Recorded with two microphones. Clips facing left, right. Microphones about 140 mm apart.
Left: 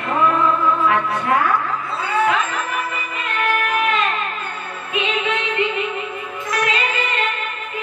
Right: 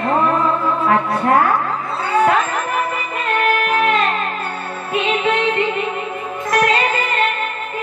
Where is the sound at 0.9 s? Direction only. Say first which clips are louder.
Right 3 dB; 40° right (ahead or behind).